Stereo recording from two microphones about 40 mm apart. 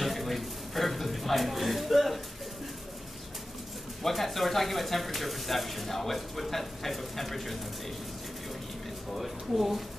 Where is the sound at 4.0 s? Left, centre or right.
Centre.